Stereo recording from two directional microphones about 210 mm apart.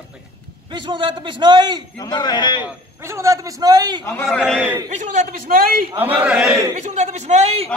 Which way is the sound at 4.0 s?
15° left (ahead or behind).